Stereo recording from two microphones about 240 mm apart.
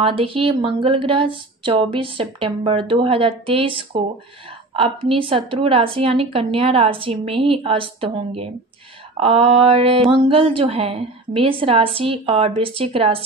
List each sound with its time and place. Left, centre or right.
0.0 s speech: right